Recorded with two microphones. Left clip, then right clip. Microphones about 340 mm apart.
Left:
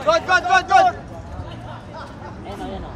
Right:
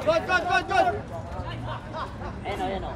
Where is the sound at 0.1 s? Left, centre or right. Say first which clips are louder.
Left 7 dB; left.